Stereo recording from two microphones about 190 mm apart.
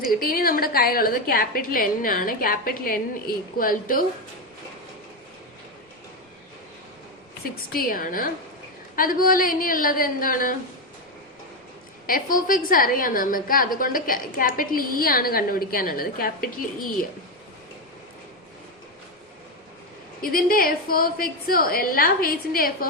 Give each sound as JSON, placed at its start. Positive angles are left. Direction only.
{"t": 0.2, "sound": "a woman's voice", "side_deg": 50}
{"t": 7.7, "sound": "a woman's voice", "side_deg": 50}
{"t": 12.0, "sound": "a woman's voice", "side_deg": 45}
{"t": 20.2, "sound": "a woman's voice", "side_deg": 50}